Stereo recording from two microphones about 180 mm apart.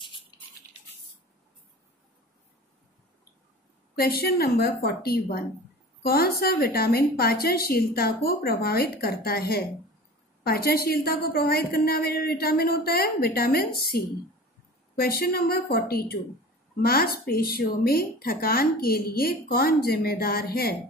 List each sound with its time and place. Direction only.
3.9 s a woman's voice: 60° left (ahead or behind)